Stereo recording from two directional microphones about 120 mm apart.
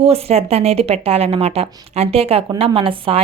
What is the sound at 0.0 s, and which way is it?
A woman's voice, 55° right (ahead or behind).